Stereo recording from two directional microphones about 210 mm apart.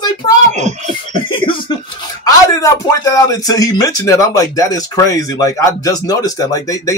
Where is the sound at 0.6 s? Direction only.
35° right (ahead or behind).